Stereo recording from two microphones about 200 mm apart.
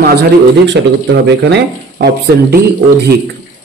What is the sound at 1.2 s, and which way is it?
Speech, 60° right (ahead or behind).